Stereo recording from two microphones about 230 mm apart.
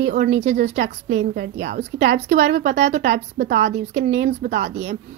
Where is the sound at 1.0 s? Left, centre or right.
Right.